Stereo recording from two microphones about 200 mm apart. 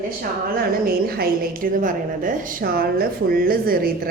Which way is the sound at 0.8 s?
50° right (ahead or behind).